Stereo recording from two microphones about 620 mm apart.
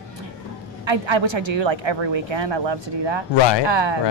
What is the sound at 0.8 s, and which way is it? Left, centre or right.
A woman's voice, right.